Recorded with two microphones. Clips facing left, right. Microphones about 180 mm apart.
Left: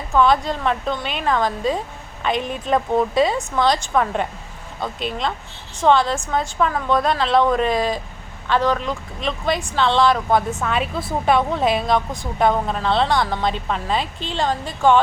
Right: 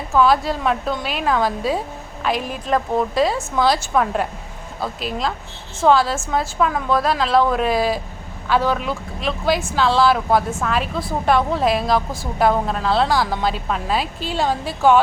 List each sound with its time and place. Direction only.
0.1 s a woman's voice: 5° right (ahead or behind)